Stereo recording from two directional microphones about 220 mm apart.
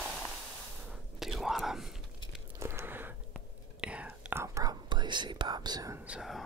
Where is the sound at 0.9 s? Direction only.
Centre (ahead or behind).